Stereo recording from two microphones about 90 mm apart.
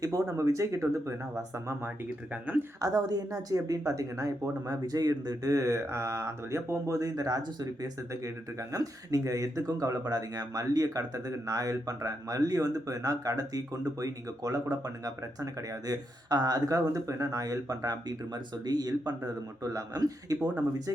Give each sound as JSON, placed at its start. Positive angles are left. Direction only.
{"t": 0.0, "sound": "speech", "side_deg": -40}
{"t": 2.8, "sound": "speech", "side_deg": -45}